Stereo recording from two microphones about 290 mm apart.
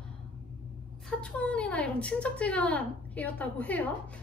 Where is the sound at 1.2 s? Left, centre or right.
Centre.